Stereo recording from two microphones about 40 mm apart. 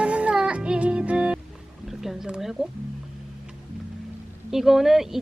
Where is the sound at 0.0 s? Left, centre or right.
Right.